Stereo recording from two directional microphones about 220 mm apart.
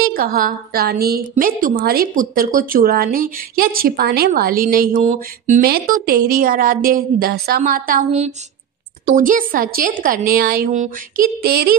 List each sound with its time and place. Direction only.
0.0 s a woman's voice: 45° right (ahead or behind)